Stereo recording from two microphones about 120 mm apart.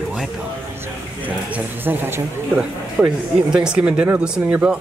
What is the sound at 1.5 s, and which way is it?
Speech, 15° right (ahead or behind).